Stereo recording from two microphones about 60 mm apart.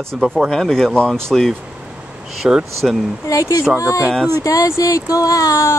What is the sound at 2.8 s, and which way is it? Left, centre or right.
Speech, centre.